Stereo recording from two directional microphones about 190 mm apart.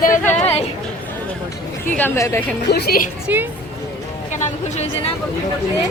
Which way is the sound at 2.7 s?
55° left (ahead or behind).